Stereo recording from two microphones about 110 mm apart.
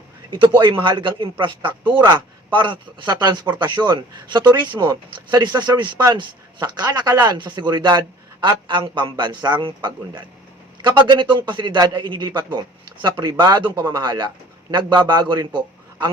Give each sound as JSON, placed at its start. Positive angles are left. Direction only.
{"t": 0.3, "sound": "a man's voice", "side_deg": -50}